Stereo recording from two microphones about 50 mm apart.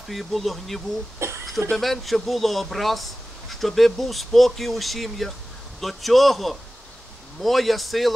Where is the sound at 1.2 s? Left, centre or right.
Right.